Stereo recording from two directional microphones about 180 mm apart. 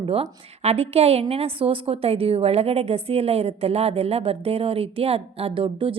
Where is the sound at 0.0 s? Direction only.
35° right (ahead or behind).